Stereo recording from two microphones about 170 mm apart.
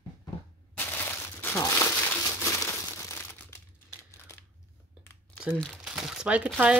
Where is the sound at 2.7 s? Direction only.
15° left (ahead or behind).